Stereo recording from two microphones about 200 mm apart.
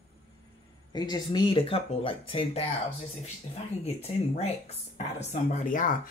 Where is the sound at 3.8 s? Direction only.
30° left (ahead or behind).